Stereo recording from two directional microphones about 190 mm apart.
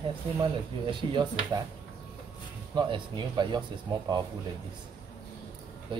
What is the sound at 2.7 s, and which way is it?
Speech, 25° right (ahead or behind).